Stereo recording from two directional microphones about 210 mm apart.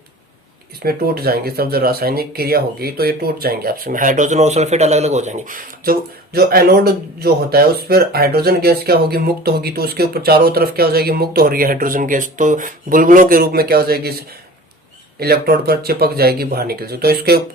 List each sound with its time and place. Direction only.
0.8 s speech: 45° right (ahead or behind)